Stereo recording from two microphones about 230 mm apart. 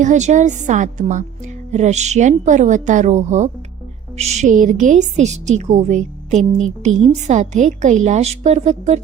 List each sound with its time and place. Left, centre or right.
0.0 s a woman's voice: right